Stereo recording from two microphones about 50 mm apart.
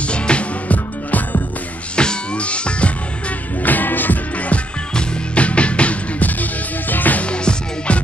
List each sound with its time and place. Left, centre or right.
0.0 s music: left
2.0 s music: left
3.6 s music: left
4.5 s music: left
7.2 s music: left